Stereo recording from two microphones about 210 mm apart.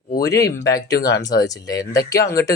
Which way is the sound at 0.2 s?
15° left (ahead or behind).